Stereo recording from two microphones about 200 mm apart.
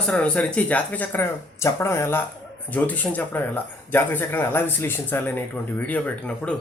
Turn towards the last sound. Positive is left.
turn(degrees=5)  # may be behind; listen again after turning